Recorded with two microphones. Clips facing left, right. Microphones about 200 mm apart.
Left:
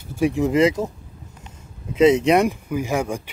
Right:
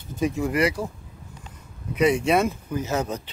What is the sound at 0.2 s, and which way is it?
Speech, 20° left (ahead or behind).